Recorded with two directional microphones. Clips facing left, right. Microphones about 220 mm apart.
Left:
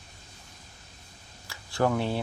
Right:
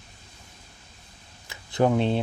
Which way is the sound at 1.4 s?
20° right (ahead or behind).